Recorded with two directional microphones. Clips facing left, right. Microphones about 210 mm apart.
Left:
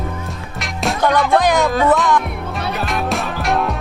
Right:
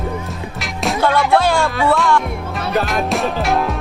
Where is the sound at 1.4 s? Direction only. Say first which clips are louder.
Left 1 dB; 15° left (ahead or behind).